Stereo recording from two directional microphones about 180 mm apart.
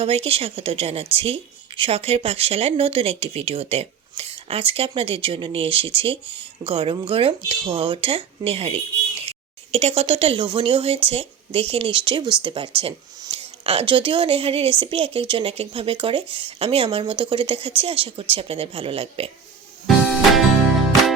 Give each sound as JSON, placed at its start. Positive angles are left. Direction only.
{"t": 0.0, "sound": "a woman's voice", "side_deg": -35}